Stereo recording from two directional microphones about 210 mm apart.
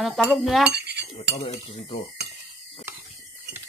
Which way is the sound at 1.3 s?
25° left (ahead or behind).